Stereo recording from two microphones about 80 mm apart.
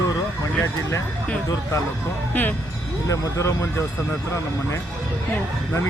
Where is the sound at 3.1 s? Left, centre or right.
Left.